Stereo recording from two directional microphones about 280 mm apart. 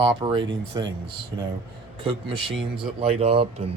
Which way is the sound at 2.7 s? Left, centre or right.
Centre.